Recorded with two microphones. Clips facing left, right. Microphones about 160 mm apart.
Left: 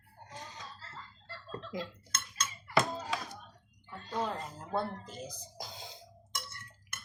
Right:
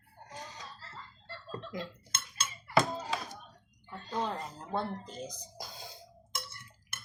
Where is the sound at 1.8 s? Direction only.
30° right (ahead or behind).